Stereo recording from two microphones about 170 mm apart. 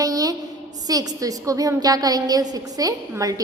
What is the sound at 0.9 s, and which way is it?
A woman's voice, 20° right (ahead or behind).